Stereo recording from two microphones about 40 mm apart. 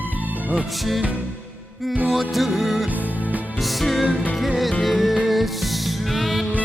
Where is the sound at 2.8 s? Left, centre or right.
Right.